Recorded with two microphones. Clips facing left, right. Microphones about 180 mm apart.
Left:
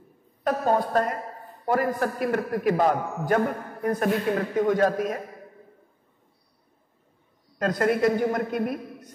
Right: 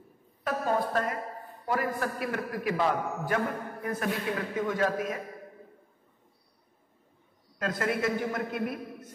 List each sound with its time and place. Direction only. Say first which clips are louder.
0.4 s a woman's voice: left 5 dB; 40° left (ahead or behind)
7.5 s a man's voice: left 7 dB; 40° left (ahead or behind)